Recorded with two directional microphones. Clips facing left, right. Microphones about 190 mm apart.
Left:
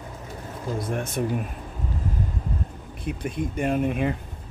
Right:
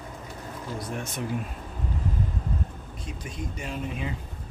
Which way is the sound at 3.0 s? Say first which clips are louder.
Left 9 dB; 55° left (ahead or behind).